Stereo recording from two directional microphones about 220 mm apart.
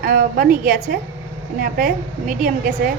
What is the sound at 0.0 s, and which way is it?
A woman's voice, 40° right (ahead or behind).